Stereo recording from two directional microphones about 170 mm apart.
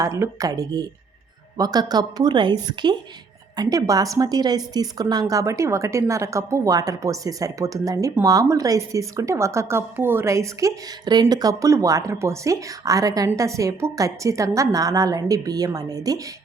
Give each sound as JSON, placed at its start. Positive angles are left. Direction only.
{"t": 0.0, "sound": "a woman's voice", "side_deg": -20}